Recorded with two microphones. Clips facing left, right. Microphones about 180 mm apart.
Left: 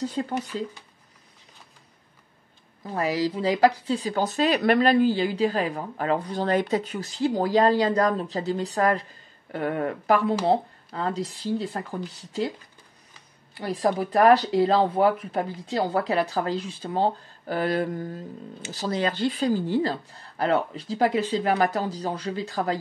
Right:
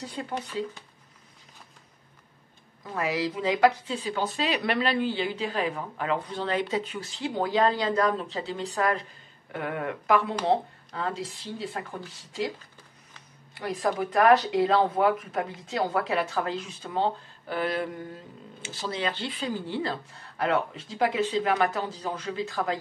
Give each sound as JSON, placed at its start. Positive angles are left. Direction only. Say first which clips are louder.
{"t": 2.9, "sound": "speech", "louder": "left 3 dB", "side_deg": 35}
{"t": 13.6, "sound": "speech", "louder": "left 3 dB", "side_deg": 30}